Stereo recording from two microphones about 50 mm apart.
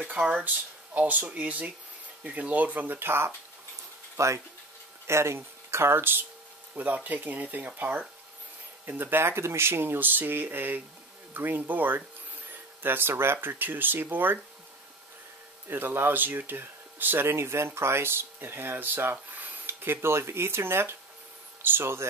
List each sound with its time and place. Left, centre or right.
0.1 s speech: right
4.2 s speech: right
5.0 s speech: right
6.7 s speech: right
8.8 s speech: right
15.7 s speech: right
17.3 s speech: right
19.8 s speech: right